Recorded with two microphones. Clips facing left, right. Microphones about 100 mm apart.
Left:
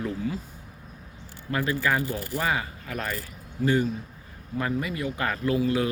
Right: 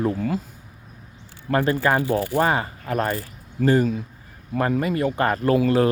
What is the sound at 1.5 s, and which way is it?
Speech, 45° right (ahead or behind).